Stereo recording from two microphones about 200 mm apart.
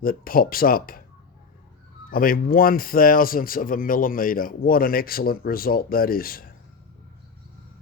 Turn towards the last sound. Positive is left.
turn(degrees=45)  # may be behind; listen again after turning